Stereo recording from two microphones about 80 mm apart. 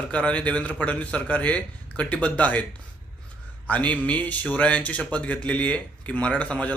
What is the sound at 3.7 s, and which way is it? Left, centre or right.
A man's voice, centre.